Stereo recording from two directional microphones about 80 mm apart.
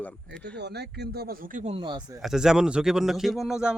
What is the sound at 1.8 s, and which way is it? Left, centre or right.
Speech, right.